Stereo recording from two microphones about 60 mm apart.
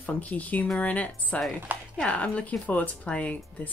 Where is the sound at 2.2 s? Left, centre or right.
Left.